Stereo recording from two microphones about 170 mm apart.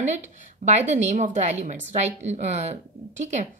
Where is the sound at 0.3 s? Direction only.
40° right (ahead or behind).